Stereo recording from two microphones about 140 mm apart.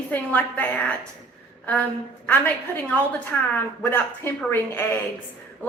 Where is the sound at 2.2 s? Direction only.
10° left (ahead or behind).